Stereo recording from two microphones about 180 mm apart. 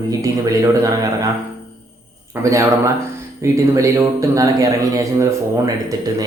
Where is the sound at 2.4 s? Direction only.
15° right (ahead or behind).